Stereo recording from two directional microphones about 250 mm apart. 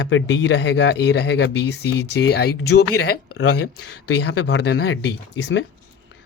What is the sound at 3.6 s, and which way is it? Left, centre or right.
Speech, left.